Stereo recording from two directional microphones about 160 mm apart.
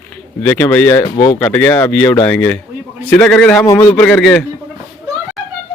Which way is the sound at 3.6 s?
20° left (ahead or behind).